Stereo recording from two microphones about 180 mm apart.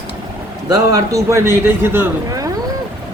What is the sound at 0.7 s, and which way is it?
A man's voice, 20° right (ahead or behind).